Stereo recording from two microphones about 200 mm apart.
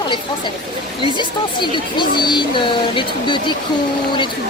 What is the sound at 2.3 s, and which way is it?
Speech, 25° left (ahead or behind).